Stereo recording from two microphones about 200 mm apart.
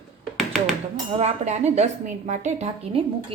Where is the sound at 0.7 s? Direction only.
35° right (ahead or behind).